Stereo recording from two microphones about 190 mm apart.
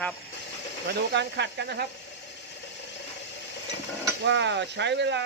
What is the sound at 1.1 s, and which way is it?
Speech, 65° right (ahead or behind).